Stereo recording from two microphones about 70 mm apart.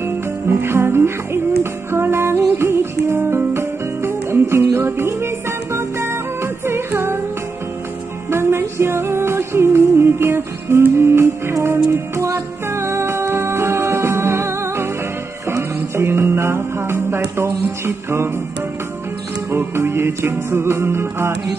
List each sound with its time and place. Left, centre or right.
0.0 s music: right
8.3 s music: right
16.0 s music: right
19.5 s music: right